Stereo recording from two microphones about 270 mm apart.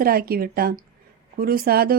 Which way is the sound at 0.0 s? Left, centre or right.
Right.